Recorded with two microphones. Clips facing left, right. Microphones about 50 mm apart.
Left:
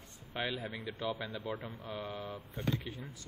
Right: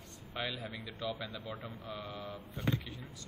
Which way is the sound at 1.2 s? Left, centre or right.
Left.